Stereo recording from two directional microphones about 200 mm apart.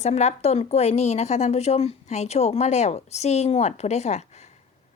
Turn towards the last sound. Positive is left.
turn(degrees=35)  # may be behind; listen again after turning